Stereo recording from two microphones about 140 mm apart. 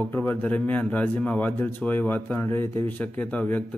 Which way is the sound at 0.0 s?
15° left (ahead or behind).